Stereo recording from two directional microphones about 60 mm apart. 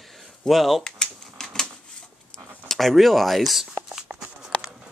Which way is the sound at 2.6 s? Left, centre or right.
Centre.